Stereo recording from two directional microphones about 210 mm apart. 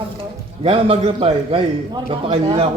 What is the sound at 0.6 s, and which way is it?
A man's voice, 25° right (ahead or behind).